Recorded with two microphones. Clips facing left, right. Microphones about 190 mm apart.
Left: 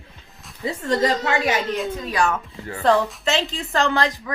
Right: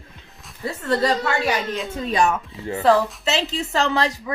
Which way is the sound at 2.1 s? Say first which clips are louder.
Right 4 dB; 20° right (ahead or behind).